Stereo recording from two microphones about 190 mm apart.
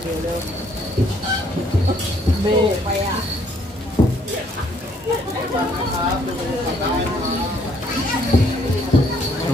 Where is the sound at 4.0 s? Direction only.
25° left (ahead or behind).